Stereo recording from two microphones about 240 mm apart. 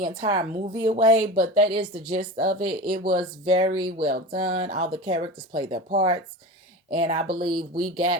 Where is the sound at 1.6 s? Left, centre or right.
Right.